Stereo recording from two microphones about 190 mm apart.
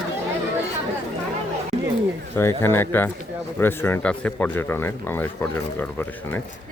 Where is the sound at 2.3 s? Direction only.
15° left (ahead or behind).